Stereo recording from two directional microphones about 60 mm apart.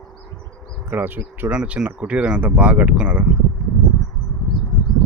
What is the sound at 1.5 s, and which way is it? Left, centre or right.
Speech, centre.